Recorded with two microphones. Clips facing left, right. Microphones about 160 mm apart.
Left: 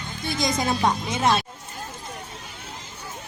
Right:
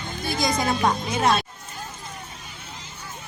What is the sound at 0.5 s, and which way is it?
Speech, 25° left (ahead or behind).